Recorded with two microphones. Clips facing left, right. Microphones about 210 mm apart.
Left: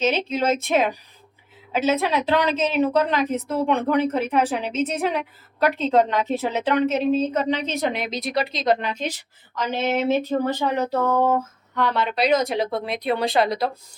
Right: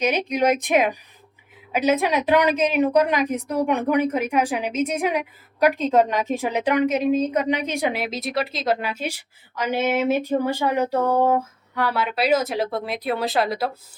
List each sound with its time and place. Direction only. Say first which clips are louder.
0.0 s a woman's voice: right 1 dB; 15° right (ahead or behind)